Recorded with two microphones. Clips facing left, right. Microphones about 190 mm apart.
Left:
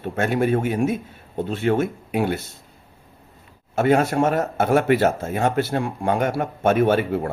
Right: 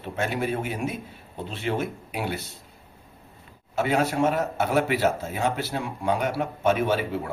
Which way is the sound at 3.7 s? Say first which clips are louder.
Left 5 dB; 50° left (ahead or behind).